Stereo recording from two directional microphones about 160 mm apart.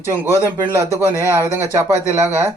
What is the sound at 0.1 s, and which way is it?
Speech, 20° right (ahead or behind).